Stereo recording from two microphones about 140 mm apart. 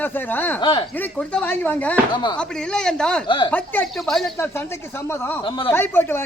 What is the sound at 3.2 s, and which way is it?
Speech, 35° left (ahead or behind).